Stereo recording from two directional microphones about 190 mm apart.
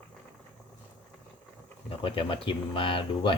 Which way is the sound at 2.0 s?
30° left (ahead or behind).